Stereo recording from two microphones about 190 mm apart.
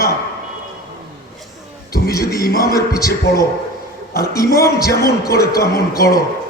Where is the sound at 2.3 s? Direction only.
55° left (ahead or behind).